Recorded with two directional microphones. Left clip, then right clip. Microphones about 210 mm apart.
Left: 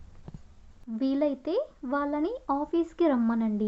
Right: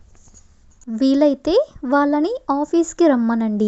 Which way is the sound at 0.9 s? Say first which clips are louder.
Right 12 dB; 40° right (ahead or behind).